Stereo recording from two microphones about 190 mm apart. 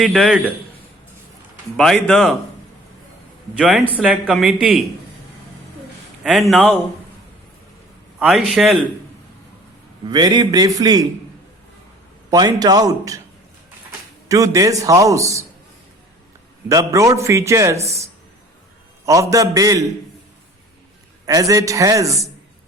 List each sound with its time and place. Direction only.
0.0 s speech: centre (ahead or behind)
1.7 s speech: centre (ahead or behind)
3.6 s speech: centre (ahead or behind)
6.2 s speech: centre (ahead or behind)
8.2 s speech: centre (ahead or behind)
10.1 s speech: 20° right (ahead or behind)
12.3 s speech: 20° right (ahead or behind)
14.3 s a man's voice: 15° right (ahead or behind)
16.6 s a man's voice: 15° right (ahead or behind)
19.0 s a man's voice: 15° right (ahead or behind)
21.2 s a man's voice: 15° right (ahead or behind)